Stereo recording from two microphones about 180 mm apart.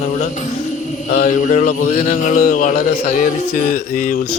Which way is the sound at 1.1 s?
45° left (ahead or behind).